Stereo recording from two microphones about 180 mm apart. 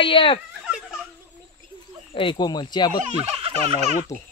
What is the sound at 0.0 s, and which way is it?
Speech, 30° left (ahead or behind).